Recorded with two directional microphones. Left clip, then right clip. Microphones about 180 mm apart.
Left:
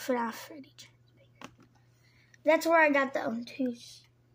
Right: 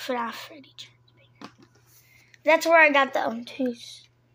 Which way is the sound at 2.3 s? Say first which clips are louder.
Right 6 dB; 20° left (ahead or behind).